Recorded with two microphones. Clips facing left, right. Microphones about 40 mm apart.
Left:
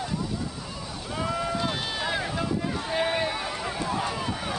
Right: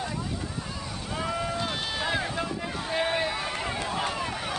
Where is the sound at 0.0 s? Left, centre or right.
Centre.